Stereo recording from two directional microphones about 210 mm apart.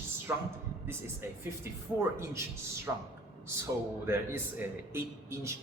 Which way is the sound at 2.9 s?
10° right (ahead or behind).